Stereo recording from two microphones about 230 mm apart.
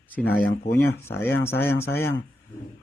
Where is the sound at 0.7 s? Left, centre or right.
Centre.